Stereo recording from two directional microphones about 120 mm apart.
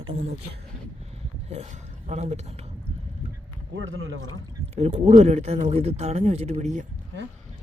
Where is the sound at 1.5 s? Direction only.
70° right (ahead or behind).